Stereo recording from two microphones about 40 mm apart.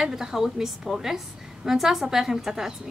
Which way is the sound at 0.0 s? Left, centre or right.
Centre.